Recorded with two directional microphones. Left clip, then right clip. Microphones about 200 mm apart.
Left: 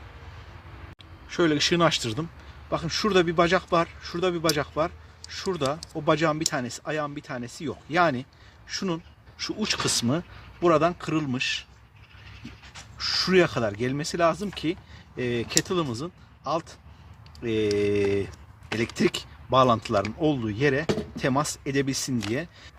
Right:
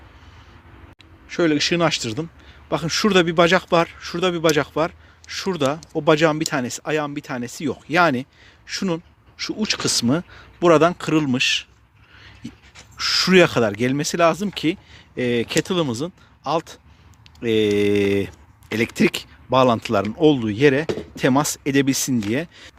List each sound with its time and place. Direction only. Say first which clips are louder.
1.3 s speech: right 4 dB; 25° right (ahead or behind)
2.6 s speech: right 6 dB; 45° right (ahead or behind)
9.4 s speech: right 4 dB; 25° right (ahead or behind); by 11.7 s 50° right (ahead or behind)
13.0 s speech: right 7 dB; 50° right (ahead or behind)